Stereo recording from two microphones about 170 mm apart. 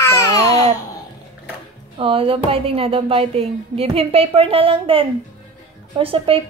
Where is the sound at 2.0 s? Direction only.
30° right (ahead or behind).